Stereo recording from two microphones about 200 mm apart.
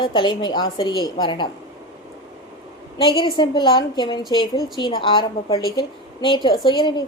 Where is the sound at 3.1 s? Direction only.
25° left (ahead or behind).